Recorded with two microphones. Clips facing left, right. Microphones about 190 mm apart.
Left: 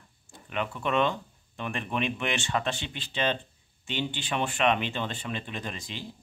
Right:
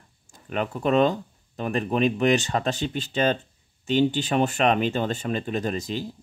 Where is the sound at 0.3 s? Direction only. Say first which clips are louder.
Right 5 dB; 40° right (ahead or behind).